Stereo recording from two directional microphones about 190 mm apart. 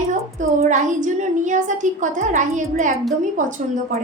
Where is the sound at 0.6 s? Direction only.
40° right (ahead or behind).